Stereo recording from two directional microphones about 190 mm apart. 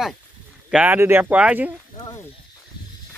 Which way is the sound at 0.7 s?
5° right (ahead or behind).